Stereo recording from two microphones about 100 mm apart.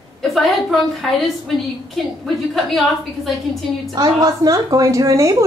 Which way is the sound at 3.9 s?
40° right (ahead or behind).